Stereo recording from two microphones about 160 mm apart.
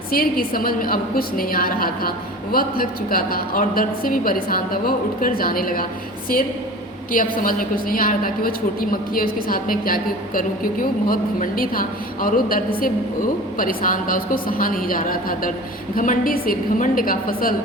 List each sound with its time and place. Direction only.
0.1 s a woman's voice: 65° left (ahead or behind)
7.1 s a woman's voice: 60° left (ahead or behind)